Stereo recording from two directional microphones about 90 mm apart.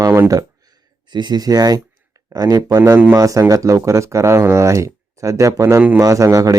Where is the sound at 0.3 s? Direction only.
45° right (ahead or behind).